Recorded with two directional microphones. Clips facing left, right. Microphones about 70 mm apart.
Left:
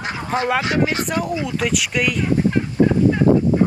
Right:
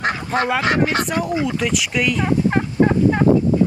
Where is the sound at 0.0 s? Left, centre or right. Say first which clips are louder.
Right 2 dB; right.